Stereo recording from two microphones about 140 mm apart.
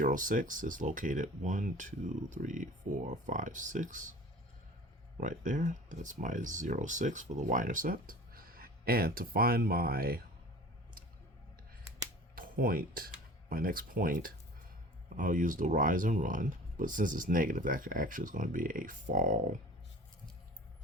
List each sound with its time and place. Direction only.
0.0 s speech: 70° right (ahead or behind)
5.2 s speech: 70° right (ahead or behind); by 10.2 s 90° right
12.3 s speech: 90° right
15.1 s speech: 70° right (ahead or behind)